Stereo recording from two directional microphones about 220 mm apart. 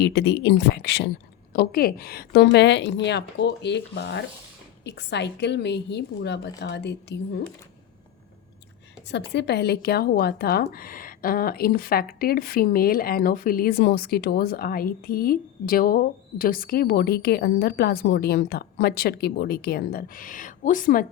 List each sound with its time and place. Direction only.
0.0 s speech: 55° left (ahead or behind)
9.0 s speech: 50° left (ahead or behind)